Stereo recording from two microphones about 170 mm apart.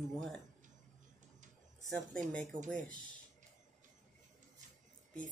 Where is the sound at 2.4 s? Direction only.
50° right (ahead or behind).